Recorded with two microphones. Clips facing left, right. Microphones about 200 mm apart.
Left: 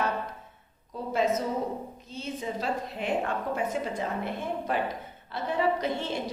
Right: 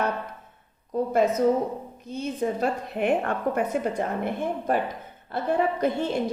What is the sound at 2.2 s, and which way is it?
A woman's voice, 55° right (ahead or behind).